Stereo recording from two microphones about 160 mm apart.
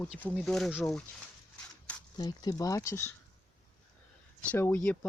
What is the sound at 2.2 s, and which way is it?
Speech, 25° left (ahead or behind).